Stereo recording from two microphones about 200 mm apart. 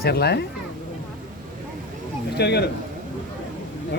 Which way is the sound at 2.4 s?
55° left (ahead or behind).